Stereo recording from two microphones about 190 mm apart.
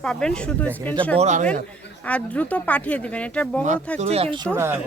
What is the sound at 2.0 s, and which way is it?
Speech, 5° left (ahead or behind).